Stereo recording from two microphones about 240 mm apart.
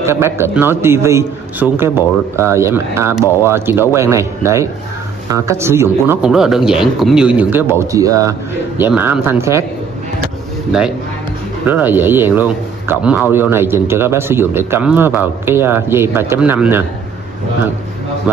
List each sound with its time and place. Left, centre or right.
0.0 s a man's voice: centre
11.6 s a man's voice: centre
18.3 s speech: centre